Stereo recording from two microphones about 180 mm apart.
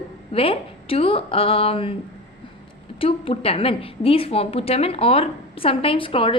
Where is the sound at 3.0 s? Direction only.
30° left (ahead or behind).